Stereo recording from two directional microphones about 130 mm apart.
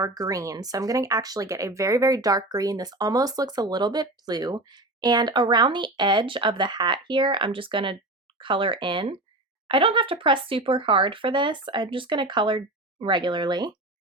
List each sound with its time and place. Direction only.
0.0 s speech: 25° right (ahead or behind)